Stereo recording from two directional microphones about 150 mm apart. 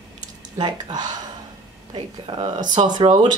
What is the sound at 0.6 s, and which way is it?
Speech, 30° right (ahead or behind).